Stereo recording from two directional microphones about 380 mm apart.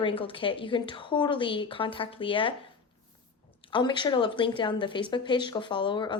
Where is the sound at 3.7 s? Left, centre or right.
Centre.